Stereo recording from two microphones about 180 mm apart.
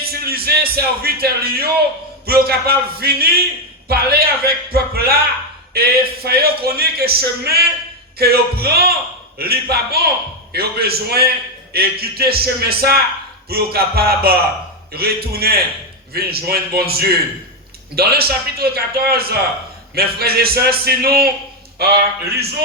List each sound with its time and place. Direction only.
0.0 s speech: 55° right (ahead or behind)